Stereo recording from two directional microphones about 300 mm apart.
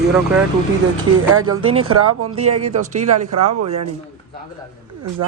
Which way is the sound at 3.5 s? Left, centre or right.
Right.